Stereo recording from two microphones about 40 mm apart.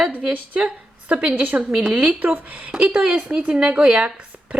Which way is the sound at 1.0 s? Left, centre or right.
Right.